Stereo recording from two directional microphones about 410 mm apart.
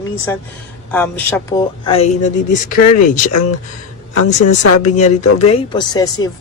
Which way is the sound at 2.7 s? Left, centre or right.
Left.